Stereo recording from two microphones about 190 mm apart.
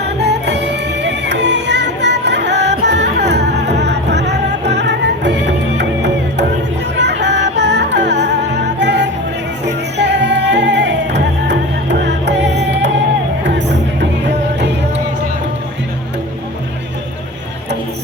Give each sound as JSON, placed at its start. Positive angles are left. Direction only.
{"t": 0.2, "sound": "music", "side_deg": -60}